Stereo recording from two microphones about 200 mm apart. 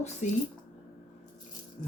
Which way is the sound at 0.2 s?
35° left (ahead or behind).